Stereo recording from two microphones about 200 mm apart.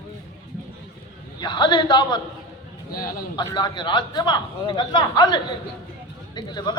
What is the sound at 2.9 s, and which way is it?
Speech, 45° left (ahead or behind).